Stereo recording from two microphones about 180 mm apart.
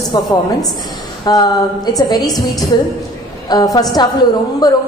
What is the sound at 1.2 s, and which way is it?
A woman's voice, 20° left (ahead or behind).